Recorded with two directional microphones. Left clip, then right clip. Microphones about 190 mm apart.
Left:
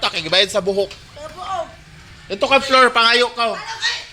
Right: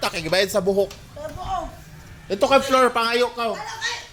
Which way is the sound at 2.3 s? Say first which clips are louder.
Left 2 dB; 30° right (ahead or behind).